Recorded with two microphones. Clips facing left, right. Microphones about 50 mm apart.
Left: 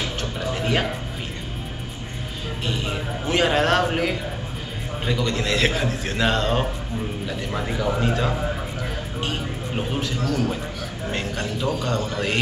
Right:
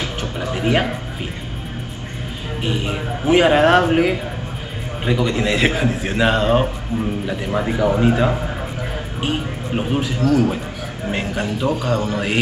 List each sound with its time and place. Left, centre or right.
0.0 s music: centre
2.6 s a man's voice: centre